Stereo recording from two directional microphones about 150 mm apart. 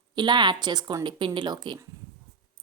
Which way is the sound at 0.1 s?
30° right (ahead or behind).